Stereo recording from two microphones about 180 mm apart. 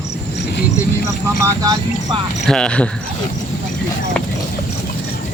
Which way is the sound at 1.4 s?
20° right (ahead or behind).